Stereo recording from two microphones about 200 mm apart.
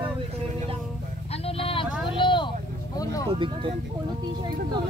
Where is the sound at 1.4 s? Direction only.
30° left (ahead or behind).